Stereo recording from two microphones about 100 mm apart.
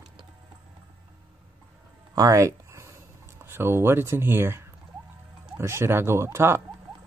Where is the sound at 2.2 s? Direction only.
35° right (ahead or behind).